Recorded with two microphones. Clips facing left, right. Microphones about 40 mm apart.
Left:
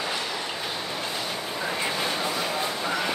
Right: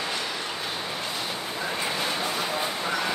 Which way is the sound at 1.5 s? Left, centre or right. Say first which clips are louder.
Left 1 dB; centre.